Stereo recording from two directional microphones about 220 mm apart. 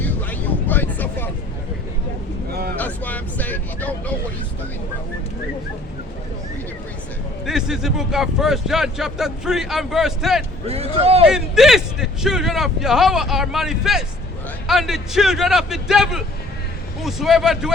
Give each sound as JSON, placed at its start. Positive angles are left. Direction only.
{"t": 0.0, "sound": "vehicle", "side_deg": 10}
{"t": 2.5, "sound": "vehicle", "side_deg": -45}
{"t": 2.7, "sound": "a sound", "side_deg": 10}
{"t": 7.4, "sound": "speech", "side_deg": 0}
{"t": 10.7, "sound": "speech", "side_deg": -25}
{"t": 11.3, "sound": "speech", "side_deg": 0}